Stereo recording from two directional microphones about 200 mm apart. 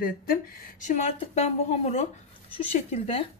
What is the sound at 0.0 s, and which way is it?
Speech, 45° left (ahead or behind).